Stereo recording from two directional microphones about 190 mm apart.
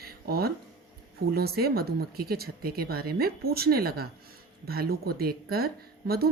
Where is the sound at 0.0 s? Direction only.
55° right (ahead or behind).